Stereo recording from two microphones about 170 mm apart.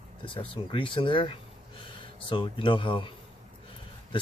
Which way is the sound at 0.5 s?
30° left (ahead or behind).